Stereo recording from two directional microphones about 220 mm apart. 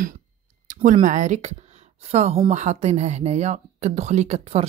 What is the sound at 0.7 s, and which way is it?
Speech, 35° right (ahead or behind).